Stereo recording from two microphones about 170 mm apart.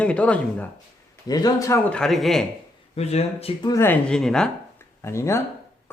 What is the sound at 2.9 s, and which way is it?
Speech, 40° left (ahead or behind).